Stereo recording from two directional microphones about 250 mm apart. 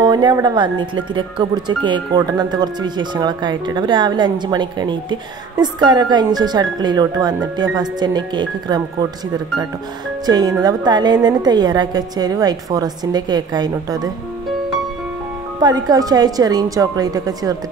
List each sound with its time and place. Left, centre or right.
0.0 s speech: centre
10.2 s speech: centre
15.6 s speech: centre